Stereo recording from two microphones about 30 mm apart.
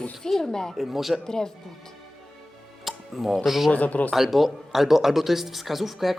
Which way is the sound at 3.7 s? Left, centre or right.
Left.